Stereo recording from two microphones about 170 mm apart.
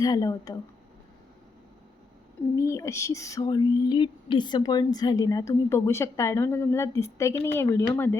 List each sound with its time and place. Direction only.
0.0 s speech: 20° left (ahead or behind)
2.6 s speech: 15° left (ahead or behind)